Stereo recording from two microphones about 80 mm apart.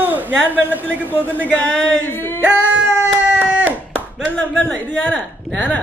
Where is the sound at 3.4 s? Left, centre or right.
Right.